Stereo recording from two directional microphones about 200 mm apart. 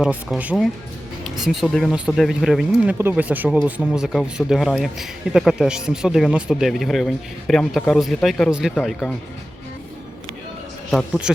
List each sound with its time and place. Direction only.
0.0 s speech: 5° right (ahead or behind)
10.9 s speech: centre (ahead or behind)